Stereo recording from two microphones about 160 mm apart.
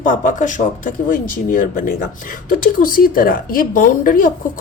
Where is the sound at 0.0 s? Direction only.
55° left (ahead or behind).